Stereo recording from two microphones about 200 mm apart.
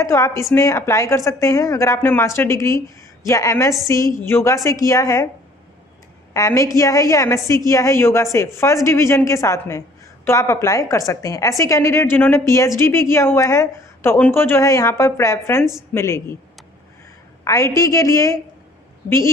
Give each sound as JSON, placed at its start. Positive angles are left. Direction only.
{"t": 0.0, "sound": "a woman's voice", "side_deg": 15}
{"t": 6.3, "sound": "a woman's voice", "side_deg": 15}
{"t": 17.5, "sound": "a woman's voice", "side_deg": 15}